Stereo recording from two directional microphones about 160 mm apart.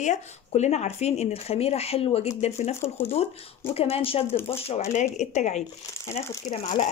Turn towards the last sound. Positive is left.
turn(degrees=50)  # may be behind; listen again after turning